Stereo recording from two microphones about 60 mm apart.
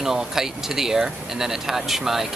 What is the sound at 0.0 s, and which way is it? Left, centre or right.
Speech, centre.